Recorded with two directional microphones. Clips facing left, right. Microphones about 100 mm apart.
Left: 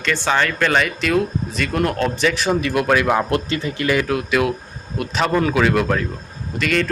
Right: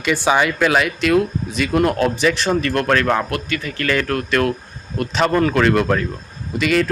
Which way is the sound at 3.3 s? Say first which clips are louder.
Left 3 dB; 25° left (ahead or behind).